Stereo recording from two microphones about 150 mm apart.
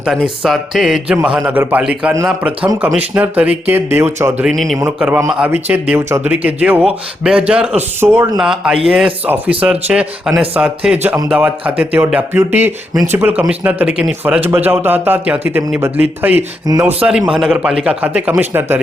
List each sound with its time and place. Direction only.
0.0 s a man's voice: centre (ahead or behind); by 4.4 s 15° right (ahead or behind)
4.4 s a man's voice: centre (ahead or behind); by 8.3 s 15° right (ahead or behind)
8.4 s a man's voice: 5° right (ahead or behind)
17.1 s speech: 5° right (ahead or behind)